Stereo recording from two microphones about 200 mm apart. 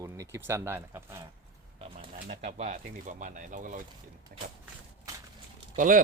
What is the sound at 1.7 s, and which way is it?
Speech, 35° right (ahead or behind).